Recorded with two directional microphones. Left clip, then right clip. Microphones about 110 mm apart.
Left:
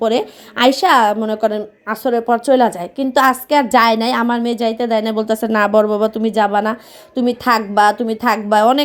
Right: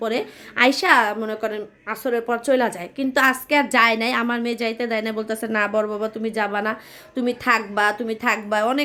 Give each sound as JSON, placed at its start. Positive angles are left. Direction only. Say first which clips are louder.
{"t": 0.0, "sound": "a woman's voice", "louder": "left 8 dB", "side_deg": 50}